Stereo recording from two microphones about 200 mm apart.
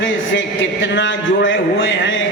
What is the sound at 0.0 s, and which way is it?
A man's voice, 70° left (ahead or behind).